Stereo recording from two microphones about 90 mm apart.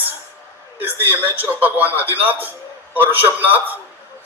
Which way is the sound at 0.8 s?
20° right (ahead or behind).